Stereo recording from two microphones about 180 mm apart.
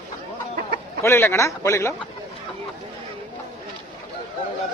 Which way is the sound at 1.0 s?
15° left (ahead or behind).